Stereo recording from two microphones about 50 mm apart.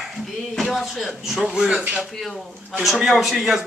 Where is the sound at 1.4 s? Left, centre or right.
Centre.